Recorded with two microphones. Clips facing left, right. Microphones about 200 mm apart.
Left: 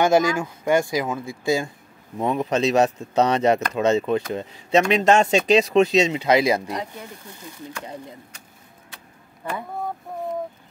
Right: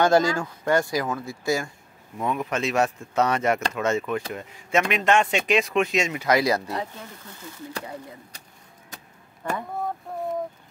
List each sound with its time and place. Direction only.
0.0 s speech: 15° left (ahead or behind)
2.1 s speech: 30° left (ahead or behind)
6.1 s speech: 20° left (ahead or behind)
8.9 s vehicle: 40° right (ahead or behind)
9.4 s speech: 10° left (ahead or behind)